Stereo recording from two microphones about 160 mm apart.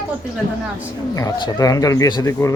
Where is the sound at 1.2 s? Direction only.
25° left (ahead or behind).